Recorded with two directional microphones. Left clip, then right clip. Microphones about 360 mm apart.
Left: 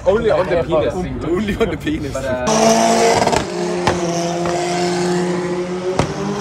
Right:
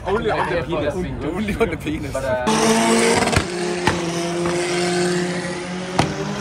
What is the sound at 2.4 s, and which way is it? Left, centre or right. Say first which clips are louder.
Vehicle: left 6 dB; left.